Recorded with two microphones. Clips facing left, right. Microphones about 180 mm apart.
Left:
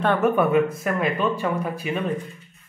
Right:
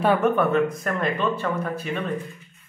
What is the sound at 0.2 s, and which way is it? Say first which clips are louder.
Speech: left 1 dB; 10° left (ahead or behind).